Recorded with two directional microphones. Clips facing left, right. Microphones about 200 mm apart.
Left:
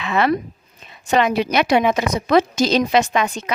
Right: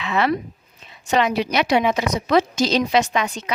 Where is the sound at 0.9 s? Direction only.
50° left (ahead or behind).